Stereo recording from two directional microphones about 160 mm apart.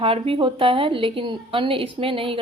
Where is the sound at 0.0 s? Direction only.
35° right (ahead or behind).